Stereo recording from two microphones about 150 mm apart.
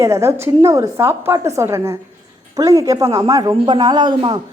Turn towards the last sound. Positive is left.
turn(degrees=-30)  # may be behind; listen again after turning